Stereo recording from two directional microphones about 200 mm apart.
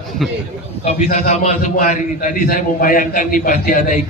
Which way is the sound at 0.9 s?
35° left (ahead or behind).